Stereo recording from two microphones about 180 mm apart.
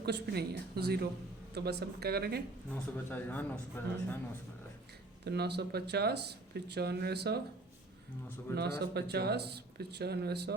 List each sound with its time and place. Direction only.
0.0 s speech: 65° right (ahead or behind)
2.7 s speech: 10° left (ahead or behind)
5.2 s speech: 65° right (ahead or behind)
8.5 s speech: 65° right (ahead or behind)